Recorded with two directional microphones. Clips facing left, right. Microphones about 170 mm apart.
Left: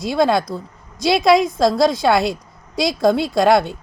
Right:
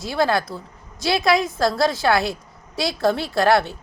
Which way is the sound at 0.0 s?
15° left (ahead or behind).